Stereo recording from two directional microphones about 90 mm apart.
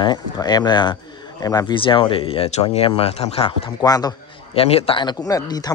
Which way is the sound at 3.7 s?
45° left (ahead or behind).